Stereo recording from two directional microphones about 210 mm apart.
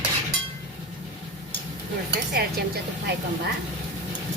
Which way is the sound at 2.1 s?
50° right (ahead or behind).